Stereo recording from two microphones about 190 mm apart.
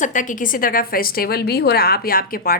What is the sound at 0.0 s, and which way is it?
A woman's voice, 40° left (ahead or behind).